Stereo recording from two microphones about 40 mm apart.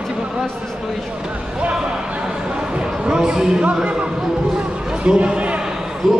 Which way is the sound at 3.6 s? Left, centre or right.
Right.